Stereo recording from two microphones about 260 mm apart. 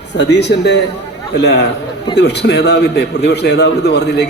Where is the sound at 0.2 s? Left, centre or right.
Left.